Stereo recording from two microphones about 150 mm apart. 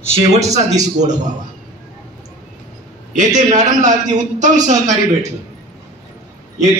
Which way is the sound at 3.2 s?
55° right (ahead or behind).